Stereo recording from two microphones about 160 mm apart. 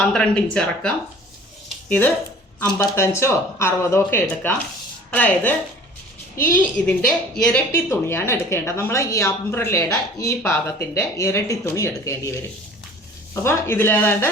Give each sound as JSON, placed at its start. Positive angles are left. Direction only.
{"t": 0.0, "sound": "a woman's voice", "side_deg": 5}
{"t": 13.3, "sound": "a woman's voice", "side_deg": 15}